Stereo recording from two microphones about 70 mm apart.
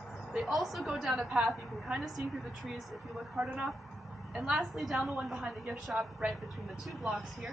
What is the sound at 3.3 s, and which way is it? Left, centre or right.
Speech, centre.